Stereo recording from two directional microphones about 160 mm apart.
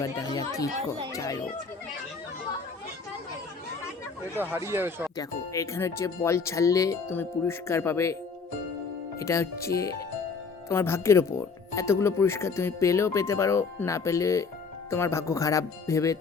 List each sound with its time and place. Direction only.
0.0 s speech: 25° left (ahead or behind)
4.4 s speech: 15° right (ahead or behind)
5.1 s speech: 20° left (ahead or behind)
9.1 s speech: 20° left (ahead or behind)